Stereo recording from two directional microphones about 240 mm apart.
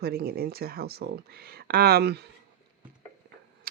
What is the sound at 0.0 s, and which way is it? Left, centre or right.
Speech, right.